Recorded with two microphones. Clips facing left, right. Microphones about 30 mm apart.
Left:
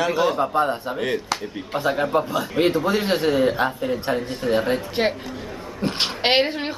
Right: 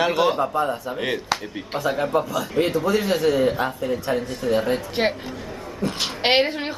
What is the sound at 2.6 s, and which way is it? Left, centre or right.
A man's voice, left.